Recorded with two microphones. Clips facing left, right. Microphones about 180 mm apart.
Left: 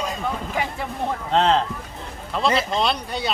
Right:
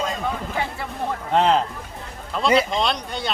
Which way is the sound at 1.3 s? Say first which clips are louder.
Right 1 dB; 10° right (ahead or behind).